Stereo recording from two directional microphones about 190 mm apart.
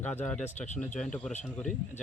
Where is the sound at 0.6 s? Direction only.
40° left (ahead or behind).